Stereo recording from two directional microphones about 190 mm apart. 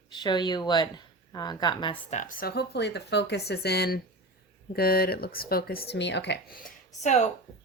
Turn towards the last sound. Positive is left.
turn(degrees=40)  # may be behind; listen again after turning